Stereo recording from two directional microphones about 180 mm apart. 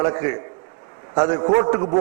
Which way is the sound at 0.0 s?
25° right (ahead or behind).